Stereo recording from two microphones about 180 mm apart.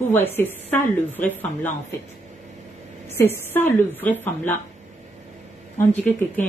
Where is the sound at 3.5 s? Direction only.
10° left (ahead or behind).